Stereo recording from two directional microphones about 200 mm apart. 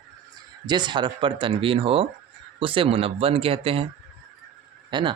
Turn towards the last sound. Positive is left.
turn(degrees=-25)  # may be behind; listen again after turning